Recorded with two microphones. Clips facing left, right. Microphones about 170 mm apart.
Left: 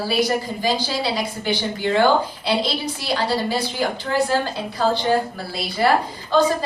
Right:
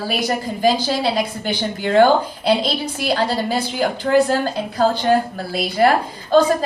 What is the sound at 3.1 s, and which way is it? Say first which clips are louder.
A woman's voice: right 2 dB; 50° right (ahead or behind).